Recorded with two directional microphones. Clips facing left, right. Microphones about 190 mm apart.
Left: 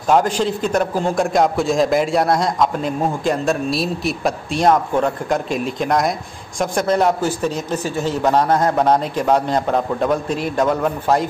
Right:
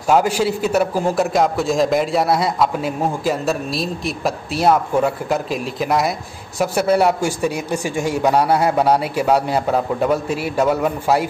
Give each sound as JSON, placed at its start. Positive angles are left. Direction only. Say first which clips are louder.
{"t": 0.1, "sound": "a man's voice", "louder": "even", "side_deg": -10}